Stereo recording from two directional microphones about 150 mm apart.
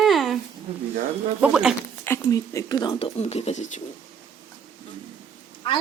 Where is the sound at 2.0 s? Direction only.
20° left (ahead or behind).